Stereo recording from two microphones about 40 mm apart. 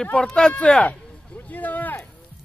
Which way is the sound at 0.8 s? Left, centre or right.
Left.